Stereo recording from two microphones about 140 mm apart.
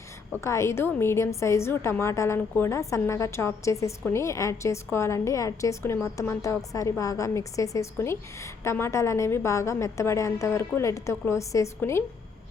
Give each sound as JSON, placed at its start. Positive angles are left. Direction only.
{"t": 0.4, "sound": "a woman's voice", "side_deg": 20}